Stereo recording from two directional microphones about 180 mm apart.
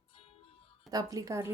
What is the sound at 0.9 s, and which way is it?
Speech, 20° right (ahead or behind).